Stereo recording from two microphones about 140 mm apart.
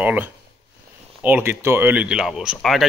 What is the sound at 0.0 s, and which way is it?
Speech, 10° right (ahead or behind).